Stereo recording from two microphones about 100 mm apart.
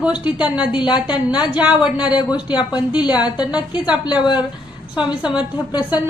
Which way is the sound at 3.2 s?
45° left (ahead or behind).